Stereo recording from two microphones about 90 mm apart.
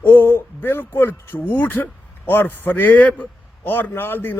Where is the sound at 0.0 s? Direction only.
25° left (ahead or behind).